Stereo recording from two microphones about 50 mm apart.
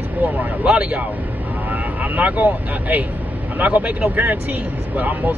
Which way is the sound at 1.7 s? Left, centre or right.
Right.